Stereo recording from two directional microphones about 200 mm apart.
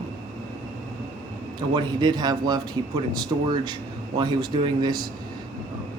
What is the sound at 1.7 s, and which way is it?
Speech, 20° right (ahead or behind).